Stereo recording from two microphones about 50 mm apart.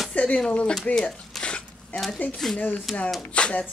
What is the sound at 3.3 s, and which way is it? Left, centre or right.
Speech, left.